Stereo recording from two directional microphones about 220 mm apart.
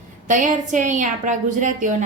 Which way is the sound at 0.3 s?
35° right (ahead or behind).